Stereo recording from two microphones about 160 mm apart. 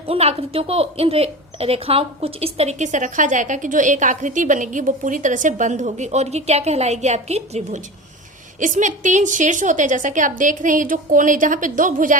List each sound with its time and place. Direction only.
0.1 s a woman's voice: 40° right (ahead or behind); by 12.1 s 55° right (ahead or behind)